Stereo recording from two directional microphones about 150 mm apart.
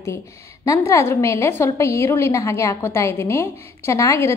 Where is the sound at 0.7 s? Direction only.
20° left (ahead or behind).